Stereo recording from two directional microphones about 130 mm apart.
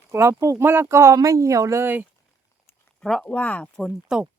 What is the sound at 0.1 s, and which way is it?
Speech, 20° right (ahead or behind).